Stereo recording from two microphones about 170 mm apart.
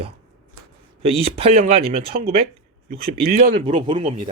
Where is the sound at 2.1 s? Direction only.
60° right (ahead or behind).